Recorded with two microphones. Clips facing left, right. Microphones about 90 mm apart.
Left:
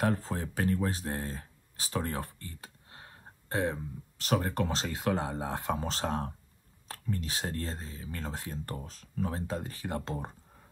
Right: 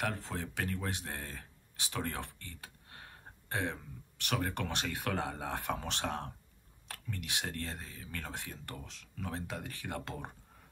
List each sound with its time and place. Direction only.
0.0 s speech: 35° left (ahead or behind)
8.6 s speech: 40° left (ahead or behind)